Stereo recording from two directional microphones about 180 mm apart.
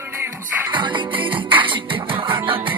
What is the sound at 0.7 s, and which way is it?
Music, 25° right (ahead or behind).